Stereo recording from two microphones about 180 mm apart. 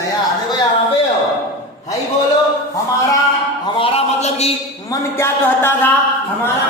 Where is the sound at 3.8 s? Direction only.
30° left (ahead or behind).